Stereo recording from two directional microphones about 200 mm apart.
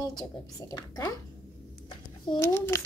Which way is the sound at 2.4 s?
15° left (ahead or behind).